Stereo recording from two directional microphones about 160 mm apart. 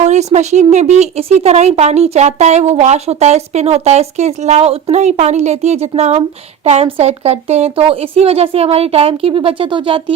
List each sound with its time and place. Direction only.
0.0 s speech: 45° right (ahead or behind)